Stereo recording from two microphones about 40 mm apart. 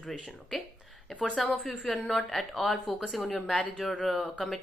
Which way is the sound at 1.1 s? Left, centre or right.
Left.